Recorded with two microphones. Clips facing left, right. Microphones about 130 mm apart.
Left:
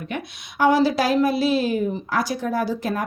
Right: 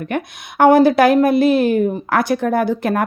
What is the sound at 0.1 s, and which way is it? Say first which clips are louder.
A woman's voice: right 7 dB; 55° right (ahead or behind).